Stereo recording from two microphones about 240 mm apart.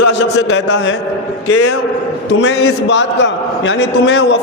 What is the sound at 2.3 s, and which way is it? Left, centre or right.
A man's voice, left.